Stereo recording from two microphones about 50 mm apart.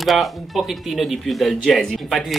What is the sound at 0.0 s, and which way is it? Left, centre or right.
Speech, centre.